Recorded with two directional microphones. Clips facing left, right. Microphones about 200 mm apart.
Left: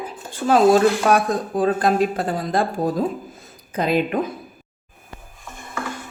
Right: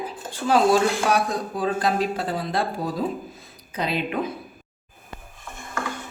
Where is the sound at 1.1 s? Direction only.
50° left (ahead or behind).